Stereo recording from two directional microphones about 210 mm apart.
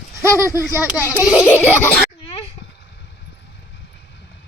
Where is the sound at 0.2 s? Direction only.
15° right (ahead or behind).